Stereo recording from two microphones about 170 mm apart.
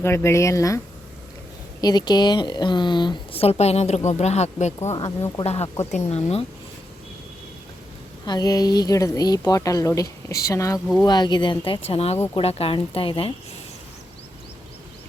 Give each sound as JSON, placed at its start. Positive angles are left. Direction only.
{"t": 0.0, "sound": "speech", "side_deg": 15}
{"t": 1.8, "sound": "speech", "side_deg": 25}
{"t": 5.6, "sound": "speech", "side_deg": 25}
{"t": 5.9, "sound": "speech", "side_deg": 40}
{"t": 8.2, "sound": "speech", "side_deg": 25}